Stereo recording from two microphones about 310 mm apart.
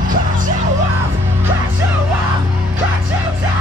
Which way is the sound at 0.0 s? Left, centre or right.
Right.